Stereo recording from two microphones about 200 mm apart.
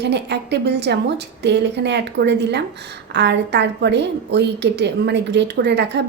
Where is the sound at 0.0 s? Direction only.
55° right (ahead or behind).